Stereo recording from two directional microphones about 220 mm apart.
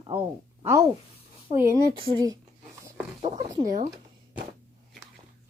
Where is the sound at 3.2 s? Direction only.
30° right (ahead or behind).